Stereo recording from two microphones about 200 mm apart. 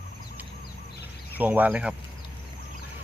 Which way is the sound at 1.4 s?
10° right (ahead or behind).